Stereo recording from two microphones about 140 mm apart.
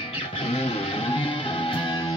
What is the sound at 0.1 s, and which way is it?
Music, 40° left (ahead or behind).